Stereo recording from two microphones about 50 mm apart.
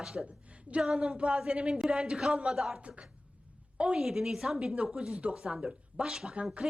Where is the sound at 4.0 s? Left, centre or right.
Centre.